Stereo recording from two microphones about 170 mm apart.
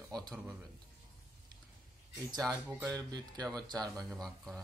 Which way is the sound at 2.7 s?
20° right (ahead or behind).